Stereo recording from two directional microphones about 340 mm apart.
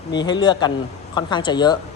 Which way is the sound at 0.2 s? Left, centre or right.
Centre.